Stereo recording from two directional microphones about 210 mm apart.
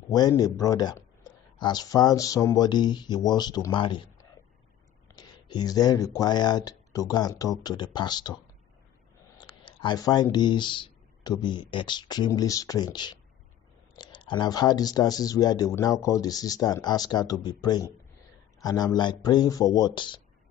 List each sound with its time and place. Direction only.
0.1 s speech: 20° left (ahead or behind)
9.4 s speech: 20° left (ahead or behind)